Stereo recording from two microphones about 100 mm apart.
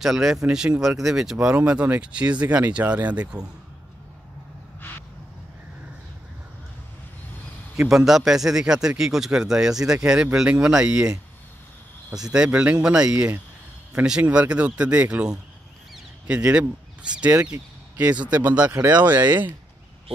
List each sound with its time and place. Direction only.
0.0 s speech: 5° right (ahead or behind)
7.7 s a man's voice: 5° right (ahead or behind)
12.3 s speech: 10° right (ahead or behind)